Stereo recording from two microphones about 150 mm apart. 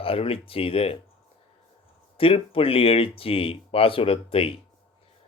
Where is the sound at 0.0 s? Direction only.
40° left (ahead or behind).